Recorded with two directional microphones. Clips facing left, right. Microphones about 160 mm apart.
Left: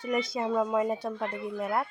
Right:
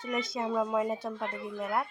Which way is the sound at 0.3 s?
Centre (ahead or behind).